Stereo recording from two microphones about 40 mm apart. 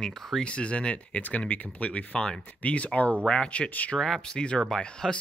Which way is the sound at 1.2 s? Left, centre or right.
Left.